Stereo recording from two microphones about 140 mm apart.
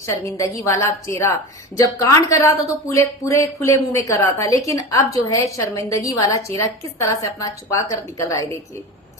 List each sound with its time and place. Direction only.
0.0 s a woman's voice: 20° left (ahead or behind)